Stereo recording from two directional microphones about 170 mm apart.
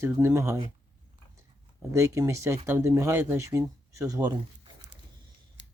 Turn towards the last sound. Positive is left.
turn(degrees=-25)  # may be behind; listen again after turning